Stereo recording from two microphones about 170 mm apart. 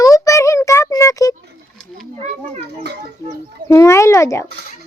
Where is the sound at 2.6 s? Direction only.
80° right.